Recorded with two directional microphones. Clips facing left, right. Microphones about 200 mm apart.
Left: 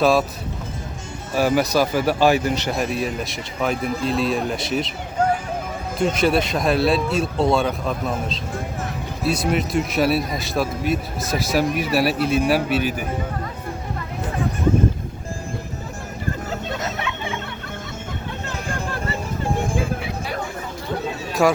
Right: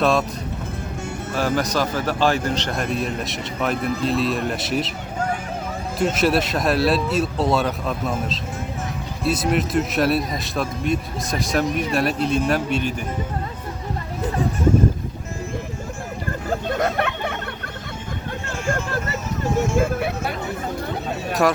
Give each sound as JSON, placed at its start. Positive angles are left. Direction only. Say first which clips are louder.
{"t": 0.0, "sound": "speech", "louder": "left 2 dB", "side_deg": 0}
{"t": 1.4, "sound": "speech", "louder": "left 4 dB", "side_deg": 10}
{"t": 6.0, "sound": "speech", "louder": "left 1 dB", "side_deg": -5}
{"t": 9.2, "sound": "speech", "louder": "even", "side_deg": 0}
{"t": 16.5, "sound": "music", "louder": "right 5 dB", "side_deg": -50}
{"t": 19.8, "sound": "vehicle", "louder": "right 4 dB", "side_deg": -55}